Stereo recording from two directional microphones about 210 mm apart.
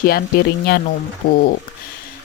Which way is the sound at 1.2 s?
45° left (ahead or behind).